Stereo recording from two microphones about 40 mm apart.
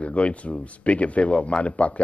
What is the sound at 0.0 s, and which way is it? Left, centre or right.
Speech, left.